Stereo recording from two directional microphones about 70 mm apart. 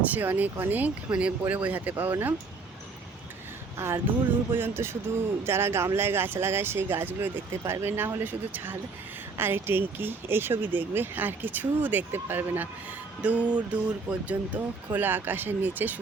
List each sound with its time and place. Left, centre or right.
0.0 s speech: right
3.8 s speech: right